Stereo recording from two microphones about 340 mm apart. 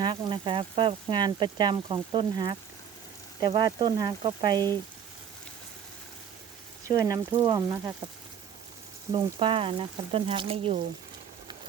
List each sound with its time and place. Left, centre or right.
0.0 s speech: centre
6.8 s speech: centre
9.1 s speech: centre